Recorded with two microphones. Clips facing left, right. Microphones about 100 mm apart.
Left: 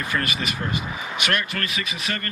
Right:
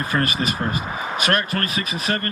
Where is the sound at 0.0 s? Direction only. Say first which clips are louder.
Right 4 dB; 35° right (ahead or behind).